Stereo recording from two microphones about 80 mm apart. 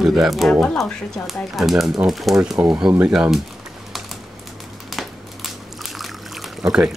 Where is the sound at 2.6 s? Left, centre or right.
Right.